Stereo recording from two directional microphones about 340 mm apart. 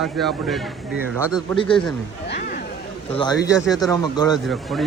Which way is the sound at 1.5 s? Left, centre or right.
Centre.